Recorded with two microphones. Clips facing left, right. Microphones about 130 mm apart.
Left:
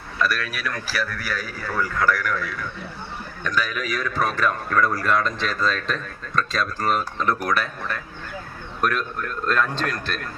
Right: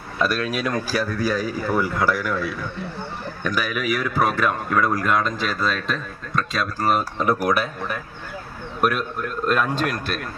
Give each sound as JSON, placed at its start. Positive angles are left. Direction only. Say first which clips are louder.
{"t": 0.2, "sound": "a man's voice", "louder": "right 3 dB", "side_deg": -25}